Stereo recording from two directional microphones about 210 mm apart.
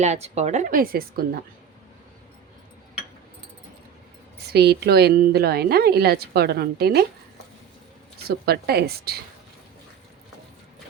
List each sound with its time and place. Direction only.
0.0 s a woman's voice: 30° right (ahead or behind)
4.4 s a woman's voice: 50° right (ahead or behind)
8.3 s a woman's voice: 50° right (ahead or behind)